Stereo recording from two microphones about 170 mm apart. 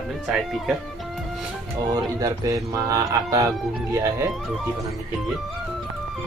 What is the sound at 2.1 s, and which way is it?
Speech, 20° right (ahead or behind).